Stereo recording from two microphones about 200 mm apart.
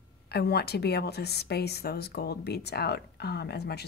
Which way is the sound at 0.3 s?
55° left (ahead or behind).